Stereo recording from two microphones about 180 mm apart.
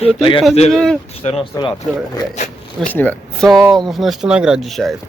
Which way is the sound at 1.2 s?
35° left (ahead or behind).